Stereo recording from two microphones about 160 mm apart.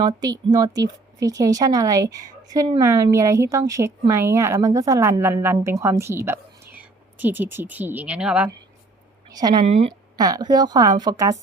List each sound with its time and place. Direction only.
0.0 s a woman's voice: 25° right (ahead or behind); by 8.4 s 10° right (ahead or behind)
9.6 s a woman's voice: 40° right (ahead or behind)
10.2 s a woman's voice: 25° right (ahead or behind)